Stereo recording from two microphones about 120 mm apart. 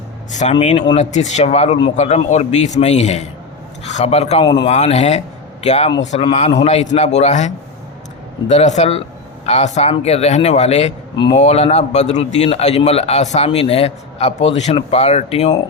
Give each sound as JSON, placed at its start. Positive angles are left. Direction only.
{"t": 0.6, "sound": "a man's voice", "side_deg": 65}